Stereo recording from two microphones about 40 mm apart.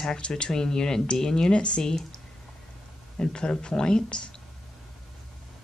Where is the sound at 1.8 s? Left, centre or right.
Centre.